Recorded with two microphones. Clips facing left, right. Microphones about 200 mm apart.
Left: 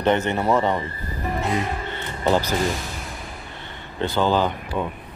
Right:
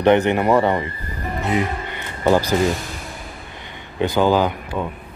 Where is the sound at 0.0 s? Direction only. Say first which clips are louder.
Right 5 dB; 15° right (ahead or behind).